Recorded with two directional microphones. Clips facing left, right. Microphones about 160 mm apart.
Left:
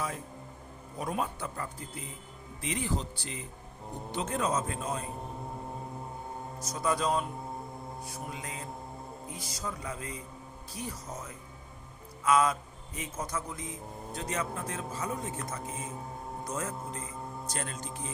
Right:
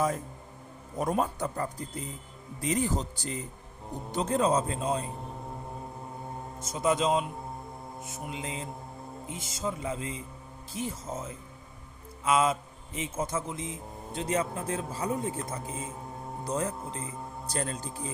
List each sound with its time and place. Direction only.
0.9 s speech: 45° right (ahead or behind); by 5.0 s 30° right (ahead or behind)
6.6 s speech: 25° right (ahead or behind)